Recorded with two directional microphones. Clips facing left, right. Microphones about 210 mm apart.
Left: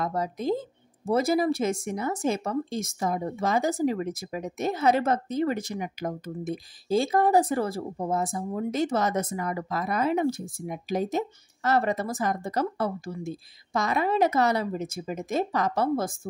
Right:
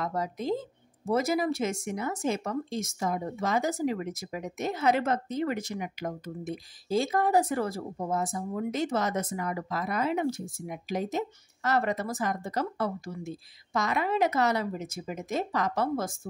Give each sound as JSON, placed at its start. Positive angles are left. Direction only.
{"t": 0.0, "sound": "speech", "side_deg": 35}